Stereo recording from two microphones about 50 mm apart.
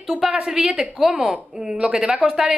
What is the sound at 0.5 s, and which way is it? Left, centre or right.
A woman's voice, centre.